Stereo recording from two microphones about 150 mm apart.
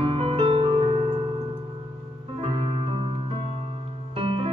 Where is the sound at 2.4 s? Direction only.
35° right (ahead or behind).